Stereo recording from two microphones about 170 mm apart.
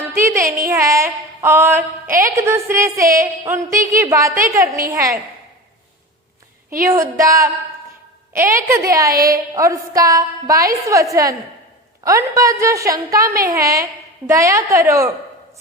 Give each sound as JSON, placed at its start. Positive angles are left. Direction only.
{"t": 0.1, "sound": "a sound", "side_deg": -15}
{"t": 0.7, "sound": "a woman's voice", "side_deg": -20}
{"t": 6.8, "sound": "a woman's voice", "side_deg": -20}
{"t": 9.1, "sound": "a woman's voice", "side_deg": -60}
{"t": 9.6, "sound": "a woman's voice", "side_deg": -20}